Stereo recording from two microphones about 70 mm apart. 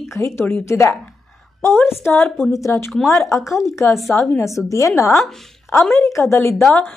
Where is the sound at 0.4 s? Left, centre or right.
Left.